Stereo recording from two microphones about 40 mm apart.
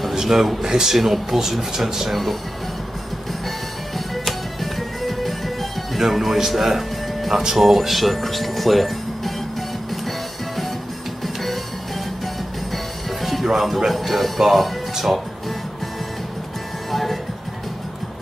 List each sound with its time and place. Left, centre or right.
0.1 s speech: centre
4.1 s music: centre
12.7 s music: centre
13.8 s speech: centre
16.9 s music: centre